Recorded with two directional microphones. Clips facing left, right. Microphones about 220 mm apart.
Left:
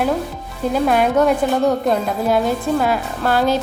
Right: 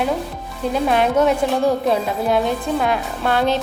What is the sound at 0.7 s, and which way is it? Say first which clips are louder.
Speech: left 1 dB; centre (ahead or behind).